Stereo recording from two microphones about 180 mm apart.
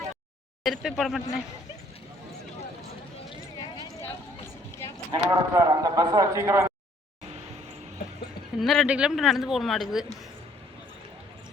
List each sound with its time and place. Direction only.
0.6 s speech: centre (ahead or behind)
3.2 s clip-clop: 25° left (ahead or behind)
5.3 s speech: 20° right (ahead or behind)
8.5 s speech: centre (ahead or behind)